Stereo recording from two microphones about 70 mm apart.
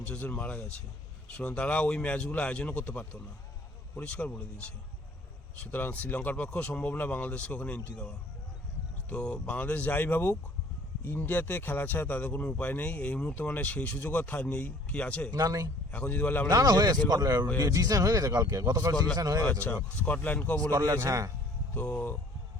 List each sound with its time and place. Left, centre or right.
0.0 s a man's voice: left
9.0 s a man's voice: centre
15.3 s speech: right
15.9 s speech: left
16.5 s speech: right
19.6 s speech: left
20.7 s a man's voice: right
21.8 s a man's voice: centre